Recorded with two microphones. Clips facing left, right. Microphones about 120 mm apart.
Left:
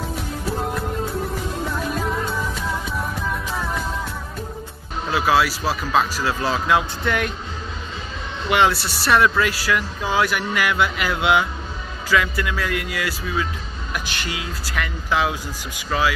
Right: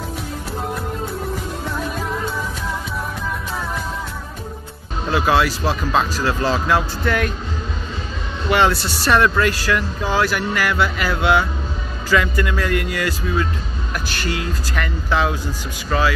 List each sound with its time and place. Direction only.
2.0 s music: centre (ahead or behind)
5.1 s speech: 5° left (ahead or behind)
8.5 s speech: 10° left (ahead or behind)